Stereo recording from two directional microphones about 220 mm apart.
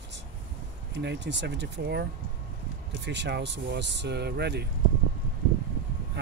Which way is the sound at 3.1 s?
50° right (ahead or behind).